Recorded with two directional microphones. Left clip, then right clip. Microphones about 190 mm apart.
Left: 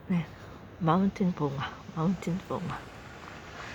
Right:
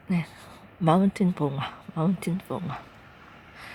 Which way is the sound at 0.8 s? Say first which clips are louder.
Right 5 dB; 30° right (ahead or behind).